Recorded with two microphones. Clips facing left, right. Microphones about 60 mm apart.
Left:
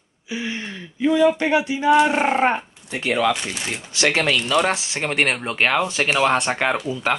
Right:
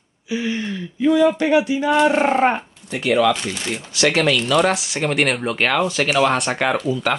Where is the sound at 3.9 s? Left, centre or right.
Left.